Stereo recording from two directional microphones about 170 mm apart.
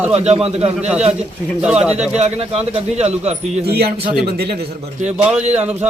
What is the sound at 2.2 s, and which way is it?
A man's voice, 40° right (ahead or behind).